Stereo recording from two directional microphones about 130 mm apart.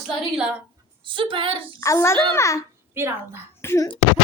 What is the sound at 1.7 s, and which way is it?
Child singing, 25° left (ahead or behind).